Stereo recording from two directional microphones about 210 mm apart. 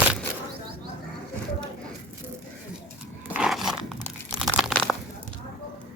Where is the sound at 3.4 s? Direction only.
Centre (ahead or behind).